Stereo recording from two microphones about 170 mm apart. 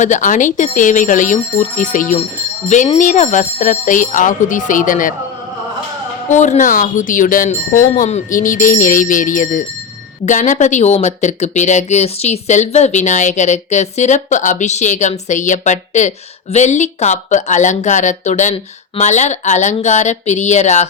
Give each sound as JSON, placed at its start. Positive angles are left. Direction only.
{"t": 0.0, "sound": "speech", "side_deg": 45}
{"t": 6.3, "sound": "speech", "side_deg": 45}